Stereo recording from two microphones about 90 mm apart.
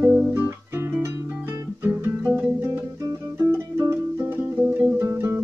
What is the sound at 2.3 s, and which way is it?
Music, 20° right (ahead or behind).